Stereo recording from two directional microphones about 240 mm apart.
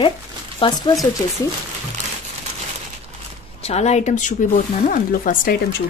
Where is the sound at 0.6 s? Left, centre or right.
Left.